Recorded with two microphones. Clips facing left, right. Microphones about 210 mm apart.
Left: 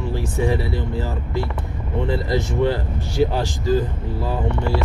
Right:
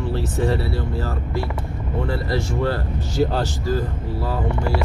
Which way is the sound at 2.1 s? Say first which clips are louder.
Left 3 dB; 20° left (ahead or behind).